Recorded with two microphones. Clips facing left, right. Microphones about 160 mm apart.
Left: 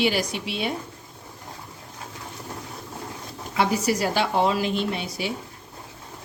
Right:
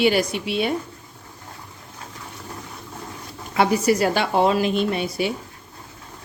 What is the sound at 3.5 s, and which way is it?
A woman's voice, 60° right (ahead or behind).